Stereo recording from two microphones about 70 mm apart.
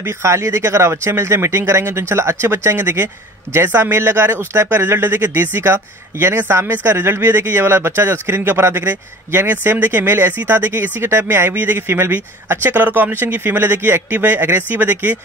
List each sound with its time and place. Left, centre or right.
0.0 s speech: right